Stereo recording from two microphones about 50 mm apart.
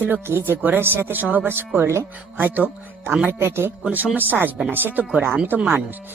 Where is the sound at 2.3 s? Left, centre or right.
Right.